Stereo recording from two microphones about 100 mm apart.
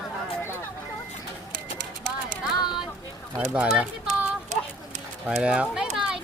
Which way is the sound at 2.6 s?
50° left (ahead or behind).